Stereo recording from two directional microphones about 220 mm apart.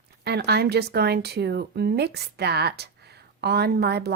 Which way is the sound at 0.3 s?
45° right (ahead or behind).